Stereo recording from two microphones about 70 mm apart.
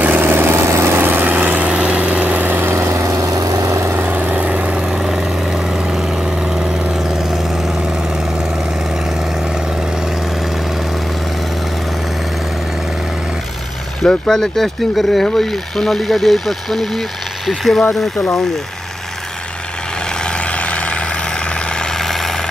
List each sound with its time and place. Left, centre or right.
0.0 s vehicle: right
3.9 s vehicle: right
4.8 s vehicle: centre
14.2 s speech: centre
20.2 s vehicle: centre